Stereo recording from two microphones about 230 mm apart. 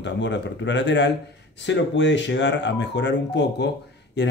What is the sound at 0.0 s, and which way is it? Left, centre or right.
Speech, left.